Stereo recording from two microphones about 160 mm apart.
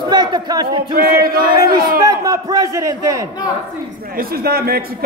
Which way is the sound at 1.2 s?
70° right (ahead or behind).